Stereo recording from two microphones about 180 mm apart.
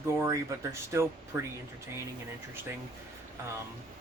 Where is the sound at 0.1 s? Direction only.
15° right (ahead or behind).